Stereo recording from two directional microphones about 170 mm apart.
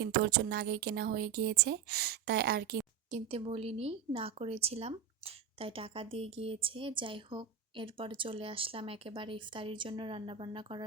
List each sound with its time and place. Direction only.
0.0 s speech: 70° right (ahead or behind)
3.1 s a woman's voice: 35° right (ahead or behind)